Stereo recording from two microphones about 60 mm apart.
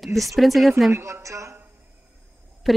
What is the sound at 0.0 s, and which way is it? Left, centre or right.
Speech, centre.